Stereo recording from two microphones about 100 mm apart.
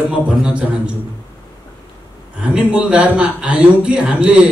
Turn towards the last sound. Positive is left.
turn(degrees=-10)  # may be behind; listen again after turning